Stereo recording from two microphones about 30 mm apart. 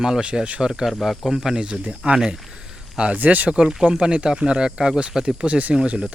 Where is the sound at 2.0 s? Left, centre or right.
Right.